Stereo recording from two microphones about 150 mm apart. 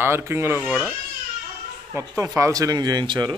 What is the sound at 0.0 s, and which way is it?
Speech, 15° right (ahead or behind).